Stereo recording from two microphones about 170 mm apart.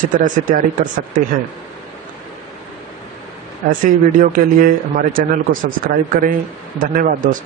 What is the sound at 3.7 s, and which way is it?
Speech, 50° right (ahead or behind).